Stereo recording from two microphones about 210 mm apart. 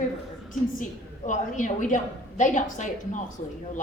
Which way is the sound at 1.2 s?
40° left (ahead or behind).